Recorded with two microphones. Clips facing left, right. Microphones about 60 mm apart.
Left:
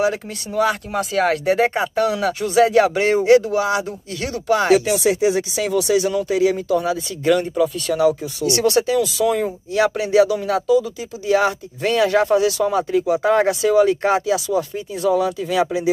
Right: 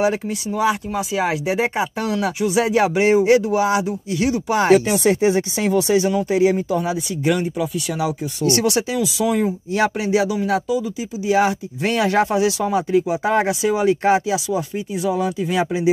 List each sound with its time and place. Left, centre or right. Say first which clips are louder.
0.5 s speech: left 1 dB; centre
4.7 s speech: right 1 dB; right; by 9.5 s centre
10.5 s speech: left 3 dB; right